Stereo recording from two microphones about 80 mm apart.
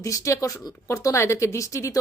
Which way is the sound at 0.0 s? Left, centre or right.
Left.